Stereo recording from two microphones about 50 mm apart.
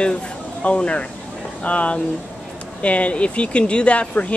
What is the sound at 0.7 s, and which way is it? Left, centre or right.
Speech, left.